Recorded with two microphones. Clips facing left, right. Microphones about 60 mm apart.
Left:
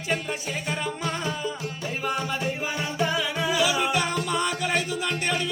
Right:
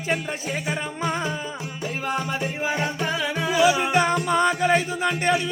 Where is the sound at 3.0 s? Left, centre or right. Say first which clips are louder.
Even; centre.